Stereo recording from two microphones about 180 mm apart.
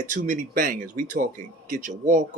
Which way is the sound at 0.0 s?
45° right (ahead or behind).